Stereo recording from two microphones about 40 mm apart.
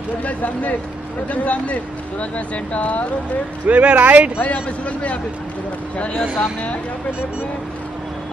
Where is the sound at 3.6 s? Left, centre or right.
Right.